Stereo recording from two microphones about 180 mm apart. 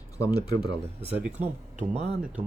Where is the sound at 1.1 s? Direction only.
10° right (ahead or behind).